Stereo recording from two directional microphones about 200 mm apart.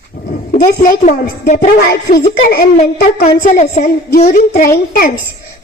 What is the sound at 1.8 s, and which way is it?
A woman's voice, 50° left (ahead or behind).